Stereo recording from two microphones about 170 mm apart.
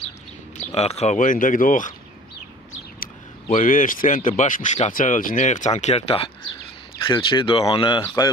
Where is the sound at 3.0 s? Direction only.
50° left (ahead or behind).